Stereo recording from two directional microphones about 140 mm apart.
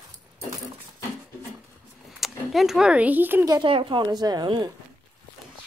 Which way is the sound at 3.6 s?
35° right (ahead or behind).